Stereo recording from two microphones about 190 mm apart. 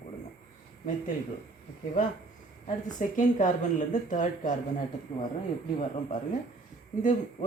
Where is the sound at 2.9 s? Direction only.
45° left (ahead or behind).